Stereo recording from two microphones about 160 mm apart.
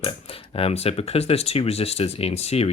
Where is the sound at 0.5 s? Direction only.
40° left (ahead or behind).